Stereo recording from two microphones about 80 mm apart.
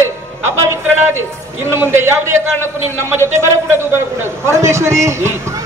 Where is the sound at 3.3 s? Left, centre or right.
Right.